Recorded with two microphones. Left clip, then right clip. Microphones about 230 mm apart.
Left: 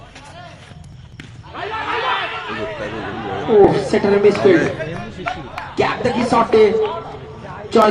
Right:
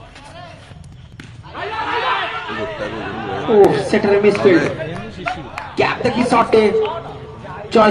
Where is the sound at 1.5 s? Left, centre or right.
Right.